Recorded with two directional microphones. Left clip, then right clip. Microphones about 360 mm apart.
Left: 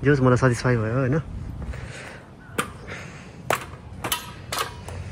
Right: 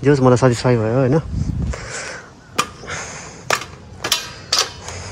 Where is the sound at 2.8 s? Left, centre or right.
Centre.